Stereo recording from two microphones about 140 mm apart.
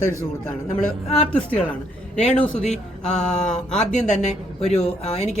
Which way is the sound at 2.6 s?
55° left (ahead or behind).